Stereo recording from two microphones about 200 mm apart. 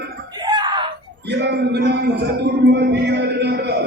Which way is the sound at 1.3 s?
55° right (ahead or behind).